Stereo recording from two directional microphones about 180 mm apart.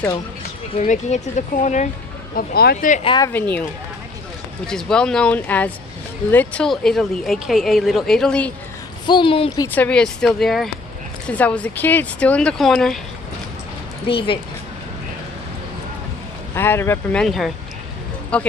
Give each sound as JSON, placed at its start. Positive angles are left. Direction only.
{"t": 0.7, "sound": "speech", "side_deg": 40}
{"t": 2.3, "sound": "speech", "side_deg": 60}
{"t": 2.9, "sound": "speech", "side_deg": 30}
{"t": 3.2, "sound": "speech", "side_deg": 10}
{"t": 4.6, "sound": "speech", "side_deg": 5}
{"t": 9.0, "sound": "speech", "side_deg": 25}
{"t": 9.8, "sound": "speech", "side_deg": 5}
{"t": 14.0, "sound": "speech", "side_deg": 30}
{"t": 16.5, "sound": "speech", "side_deg": 15}